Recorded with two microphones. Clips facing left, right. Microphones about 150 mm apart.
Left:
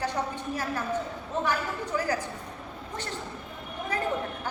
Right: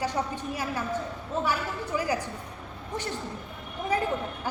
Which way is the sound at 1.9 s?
10° right (ahead or behind).